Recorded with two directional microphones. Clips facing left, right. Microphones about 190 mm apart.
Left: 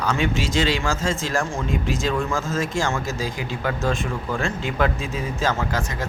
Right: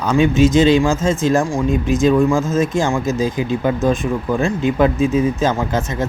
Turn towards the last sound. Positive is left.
turn(degrees=-20)  # may be behind; listen again after turning